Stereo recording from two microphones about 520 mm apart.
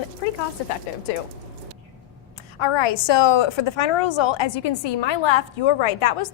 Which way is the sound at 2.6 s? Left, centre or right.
Left.